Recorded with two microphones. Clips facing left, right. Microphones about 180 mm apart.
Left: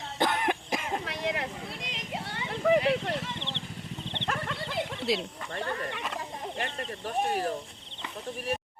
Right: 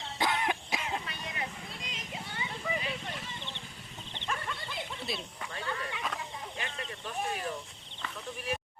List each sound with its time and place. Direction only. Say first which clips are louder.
0.2 s cough: left 4 dB; 50° left (ahead or behind)
1.0 s vehicle: left 8 dB; 80° left
4.1 s dog: left 3 dB; 70° left (ahead or behind)
5.5 s wild animals: left 4 dB; 50° left (ahead or behind)
6.6 s speech: left 6 dB; 40° left (ahead or behind)